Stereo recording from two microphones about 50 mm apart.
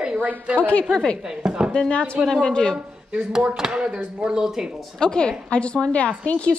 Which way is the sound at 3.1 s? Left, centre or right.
Centre.